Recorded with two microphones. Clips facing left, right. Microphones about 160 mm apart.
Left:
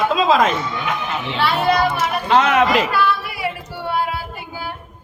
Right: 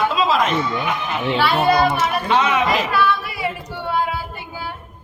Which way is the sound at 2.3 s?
75° left (ahead or behind).